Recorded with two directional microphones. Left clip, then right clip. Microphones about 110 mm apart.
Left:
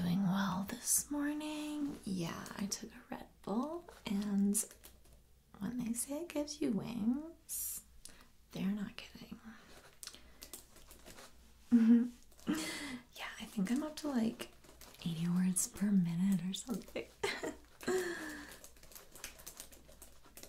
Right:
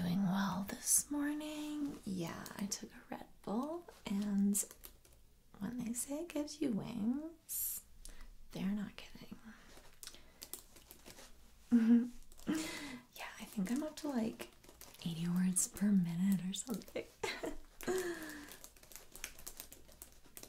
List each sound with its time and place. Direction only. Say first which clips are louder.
0.0 s whispering: left 1 dB; 15° right (ahead or behind)
5.6 s speech: left 2 dB; 20° right (ahead or behind)
8.5 s whispering: left 1 dB; 30° right (ahead or behind)
11.7 s speech: left 2 dB; 35° right (ahead or behind)
12.4 s whispering: left 1 dB; 15° right (ahead or behind)
15.0 s speech: left 1 dB; 25° right (ahead or behind)
16.9 s a sound: left 3 dB; 25° right (ahead or behind)